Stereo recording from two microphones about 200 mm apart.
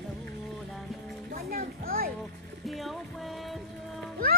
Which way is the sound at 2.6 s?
Centre (ahead or behind).